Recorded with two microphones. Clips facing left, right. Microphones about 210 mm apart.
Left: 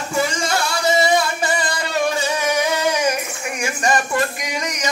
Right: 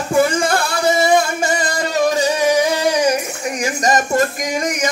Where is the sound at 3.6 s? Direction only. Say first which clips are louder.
Right 2 dB; 40° right (ahead or behind).